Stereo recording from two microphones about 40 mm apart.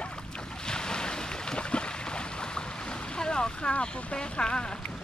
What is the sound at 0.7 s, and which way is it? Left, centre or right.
Boat, centre.